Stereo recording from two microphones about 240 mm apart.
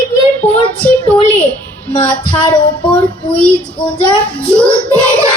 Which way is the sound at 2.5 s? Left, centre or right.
Centre.